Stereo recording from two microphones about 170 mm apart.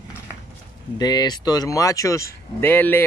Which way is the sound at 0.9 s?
25° left (ahead or behind).